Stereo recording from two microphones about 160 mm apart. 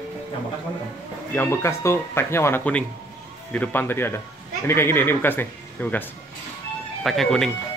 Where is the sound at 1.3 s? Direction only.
15° left (ahead or behind).